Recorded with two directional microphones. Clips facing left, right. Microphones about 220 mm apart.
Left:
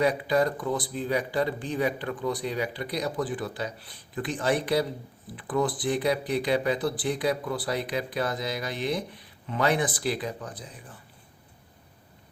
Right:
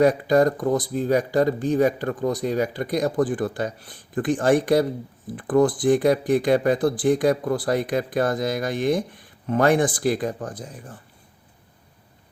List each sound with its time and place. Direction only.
0.0 s speech: 45° right (ahead or behind)